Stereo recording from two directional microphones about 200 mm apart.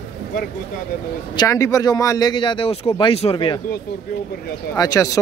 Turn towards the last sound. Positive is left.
turn(degrees=15)  # may be behind; listen again after turning